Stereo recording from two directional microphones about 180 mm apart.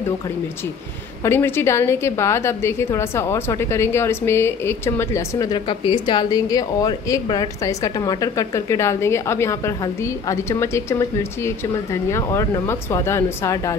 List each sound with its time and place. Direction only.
1.2 s a woman's voice: 15° left (ahead or behind)